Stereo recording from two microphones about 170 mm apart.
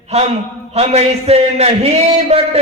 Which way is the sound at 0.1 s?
40° right (ahead or behind).